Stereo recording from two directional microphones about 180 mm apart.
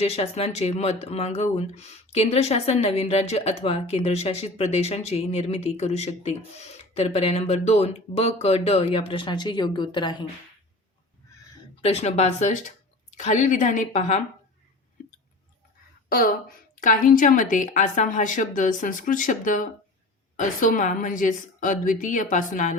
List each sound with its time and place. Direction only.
0.0 s speech: 35° left (ahead or behind)
11.8 s a woman's voice: 35° left (ahead or behind)
16.0 s a woman's voice: 55° left (ahead or behind)